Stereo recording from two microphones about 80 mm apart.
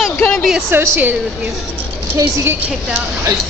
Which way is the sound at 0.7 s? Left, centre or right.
Right.